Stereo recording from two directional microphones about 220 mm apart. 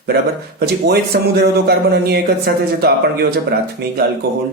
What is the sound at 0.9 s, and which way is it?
Speech, 45° right (ahead or behind).